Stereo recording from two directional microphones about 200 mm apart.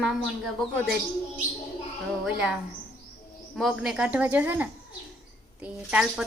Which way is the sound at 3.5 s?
Centre (ahead or behind).